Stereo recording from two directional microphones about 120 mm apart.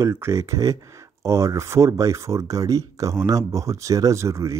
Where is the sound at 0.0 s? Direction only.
25° right (ahead or behind).